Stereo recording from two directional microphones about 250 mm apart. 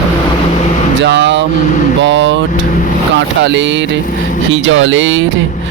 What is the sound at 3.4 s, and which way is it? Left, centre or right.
Speech, right.